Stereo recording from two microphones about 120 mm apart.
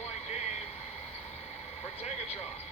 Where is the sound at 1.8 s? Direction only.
65° left (ahead or behind).